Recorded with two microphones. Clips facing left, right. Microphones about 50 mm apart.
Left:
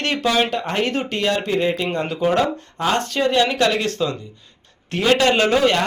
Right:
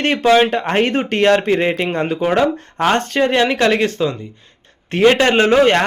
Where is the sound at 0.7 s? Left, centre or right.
Right.